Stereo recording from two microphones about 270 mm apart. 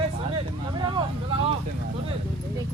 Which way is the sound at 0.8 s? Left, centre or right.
Centre.